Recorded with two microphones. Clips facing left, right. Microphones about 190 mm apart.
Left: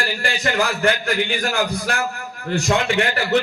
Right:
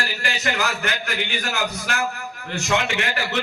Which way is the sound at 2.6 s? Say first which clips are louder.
Left 4 dB; 35° left (ahead or behind).